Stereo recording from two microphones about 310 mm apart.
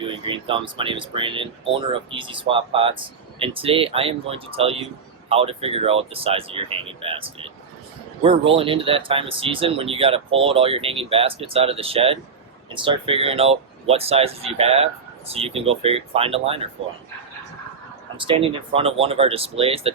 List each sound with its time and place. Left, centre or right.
0.0 s speech: centre
18.2 s speech: centre